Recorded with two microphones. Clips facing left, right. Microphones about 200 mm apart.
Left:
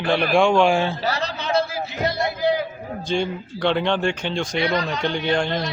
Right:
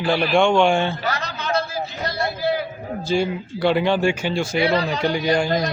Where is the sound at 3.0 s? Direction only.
5° right (ahead or behind).